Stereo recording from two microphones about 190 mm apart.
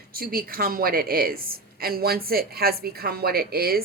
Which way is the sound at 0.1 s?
50° right (ahead or behind).